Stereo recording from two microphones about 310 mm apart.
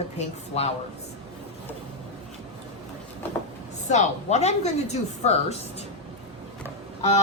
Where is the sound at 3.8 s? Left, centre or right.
Left.